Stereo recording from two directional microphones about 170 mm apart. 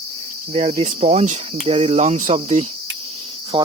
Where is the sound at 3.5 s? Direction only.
30° right (ahead or behind).